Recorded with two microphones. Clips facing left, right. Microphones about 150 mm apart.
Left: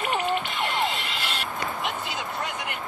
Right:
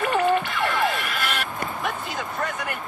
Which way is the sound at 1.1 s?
55° right (ahead or behind).